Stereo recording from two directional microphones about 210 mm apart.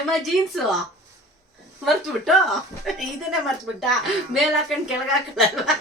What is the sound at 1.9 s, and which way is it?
Speech, centre (ahead or behind).